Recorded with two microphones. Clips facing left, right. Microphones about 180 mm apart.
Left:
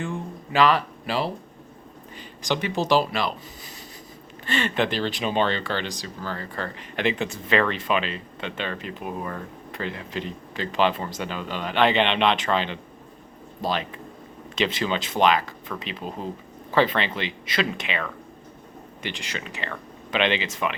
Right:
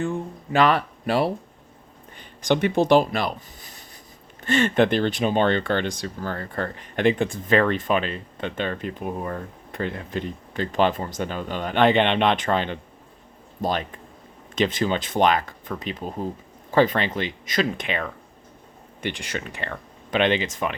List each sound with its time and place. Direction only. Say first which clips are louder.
0.5 s speech: right 1 dB; 50° right (ahead or behind)
2.4 s speech: right 5 dB; 55° right (ahead or behind)